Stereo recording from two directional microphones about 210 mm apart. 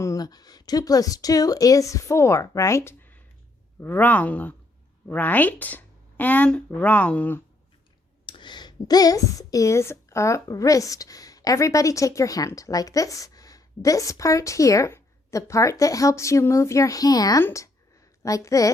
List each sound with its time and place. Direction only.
0.0 s speech: 15° left (ahead or behind)
8.3 s a woman's voice: 20° left (ahead or behind)